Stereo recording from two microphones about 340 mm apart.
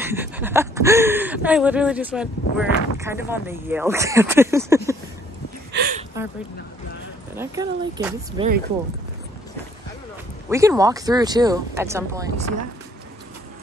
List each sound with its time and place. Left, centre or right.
0.0 s speech: centre
5.7 s a sound: right
7.3 s speech: centre
10.5 s speech: centre